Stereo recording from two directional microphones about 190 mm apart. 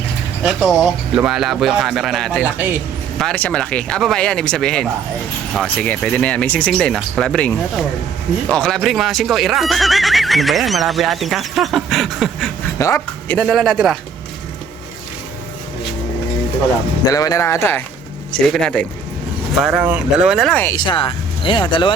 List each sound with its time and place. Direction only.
0.4 s speech: centre (ahead or behind)
3.2 s speech: 5° left (ahead or behind)
12.8 s speech: 10° left (ahead or behind)
13.4 s speech: centre (ahead or behind)
17.1 s speech: 20° left (ahead or behind); by 20.7 s 5° left (ahead or behind)
20.7 s speech: 25° left (ahead or behind)